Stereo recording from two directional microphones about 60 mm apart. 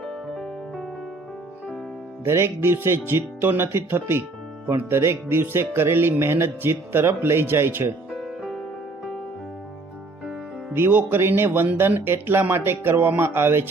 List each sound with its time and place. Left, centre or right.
0.0 s music: centre
2.2 s speech: right
8.1 s music: centre
10.7 s speech: right